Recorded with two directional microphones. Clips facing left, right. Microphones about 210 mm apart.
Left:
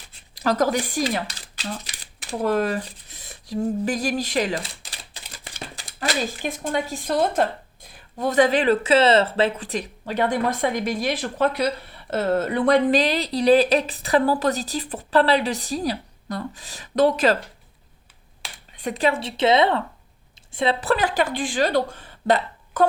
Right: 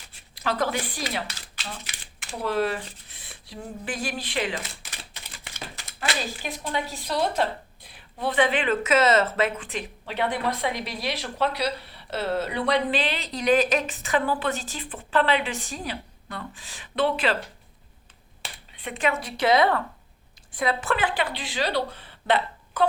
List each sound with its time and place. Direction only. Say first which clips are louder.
0.3 s a woman's voice: left 6 dB; 40° left (ahead or behind)
18.4 s finger snapping: right 1 dB; centre (ahead or behind)
18.8 s a woman's voice: left 4 dB; 40° left (ahead or behind)